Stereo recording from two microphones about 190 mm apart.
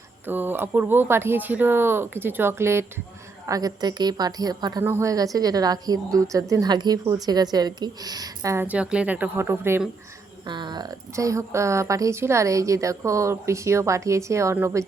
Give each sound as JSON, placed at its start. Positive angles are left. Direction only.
{"t": 0.3, "sound": "a woman's voice", "side_deg": -10}
{"t": 10.4, "sound": "speech", "side_deg": -25}